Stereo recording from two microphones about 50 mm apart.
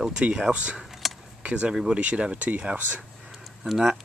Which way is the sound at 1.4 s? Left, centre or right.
Right.